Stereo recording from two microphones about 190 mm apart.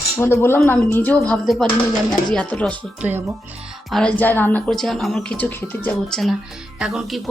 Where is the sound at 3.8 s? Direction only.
5° left (ahead or behind).